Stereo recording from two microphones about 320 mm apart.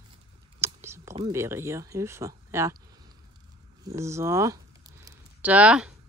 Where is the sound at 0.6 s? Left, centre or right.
Centre.